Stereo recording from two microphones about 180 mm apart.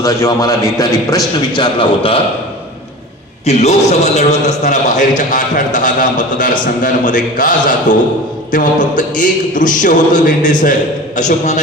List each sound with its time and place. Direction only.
0.0 s a man's voice: 15° left (ahead or behind)
3.4 s a man's voice: 40° left (ahead or behind)